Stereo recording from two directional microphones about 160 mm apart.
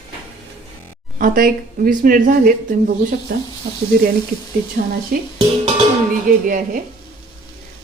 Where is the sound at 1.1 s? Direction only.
60° right (ahead or behind).